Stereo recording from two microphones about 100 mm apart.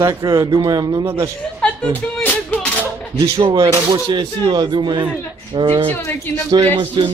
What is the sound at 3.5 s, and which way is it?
Speech, 40° right (ahead or behind).